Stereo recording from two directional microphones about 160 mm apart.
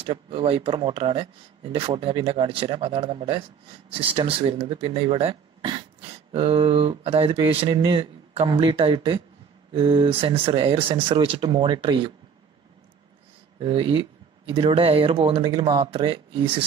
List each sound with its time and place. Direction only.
0.0 s speech: 35° right (ahead or behind)
13.6 s speech: 30° right (ahead or behind)